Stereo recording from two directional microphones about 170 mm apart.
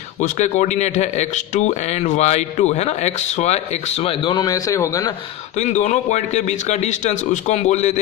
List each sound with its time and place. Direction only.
0.2 s a man's voice: 45° left (ahead or behind); by 5.1 s 20° left (ahead or behind)
5.6 s a man's voice: 45° left (ahead or behind)